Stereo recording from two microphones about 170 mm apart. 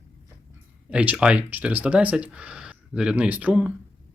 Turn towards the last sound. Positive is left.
turn(degrees=-5)  # may be behind; listen again after turning